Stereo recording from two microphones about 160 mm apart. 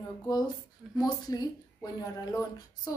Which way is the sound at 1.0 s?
25° left (ahead or behind).